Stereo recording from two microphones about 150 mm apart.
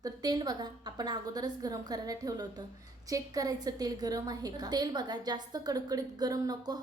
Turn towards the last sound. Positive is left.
turn(degrees=-25)  # may be behind; listen again after turning